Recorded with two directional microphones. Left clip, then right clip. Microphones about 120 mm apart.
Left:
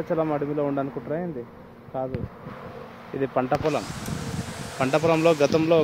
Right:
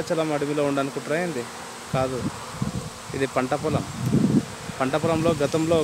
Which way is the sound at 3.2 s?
25° right (ahead or behind).